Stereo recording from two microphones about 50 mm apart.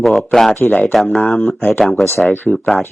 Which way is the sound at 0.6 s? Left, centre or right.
Left.